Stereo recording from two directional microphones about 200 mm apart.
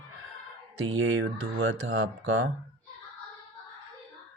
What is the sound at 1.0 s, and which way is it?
Speech, 85° right.